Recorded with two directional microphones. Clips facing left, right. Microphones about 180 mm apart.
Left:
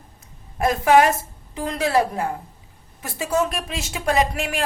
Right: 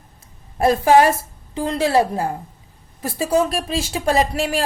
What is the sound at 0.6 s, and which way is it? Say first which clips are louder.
A woman's voice: right 3 dB; 35° right (ahead or behind).